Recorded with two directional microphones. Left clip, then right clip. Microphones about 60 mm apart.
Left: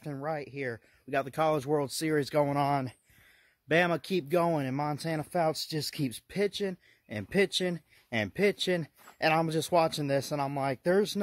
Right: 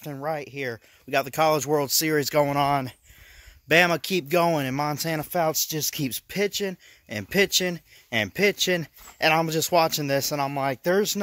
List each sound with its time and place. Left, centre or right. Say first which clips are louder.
0.2 s speech: right 6 dB; centre; by 1.9 s right
1.9 s speech: right 7 dB; right
3.6 s speech: right 7 dB; right
5.3 s speech: right 4 dB; centre
5.9 s speech: right 3 dB; centre
10.8 s speech: right 3 dB; centre